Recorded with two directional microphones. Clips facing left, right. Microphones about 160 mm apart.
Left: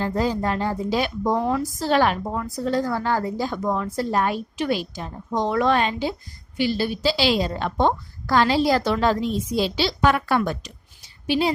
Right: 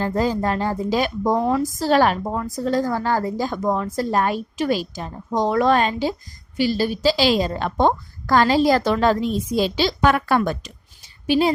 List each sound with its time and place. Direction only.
0.0 s a woman's voice: 45° right (ahead or behind)
1.4 s a woman's voice: 30° right (ahead or behind); by 11.5 s 45° right (ahead or behind)